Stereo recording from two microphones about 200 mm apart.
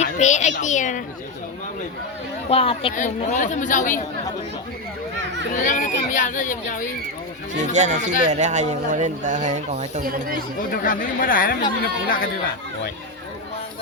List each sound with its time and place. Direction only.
0.0 s speech: 35° left (ahead or behind)
2.5 s speech: 30° left (ahead or behind)
5.5 s speech: 40° left (ahead or behind)
7.5 s speech: 35° right (ahead or behind)
10.6 s speech: 40° left (ahead or behind)